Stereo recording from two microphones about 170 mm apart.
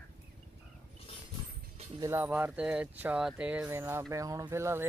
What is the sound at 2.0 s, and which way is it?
Speech, 15° right (ahead or behind).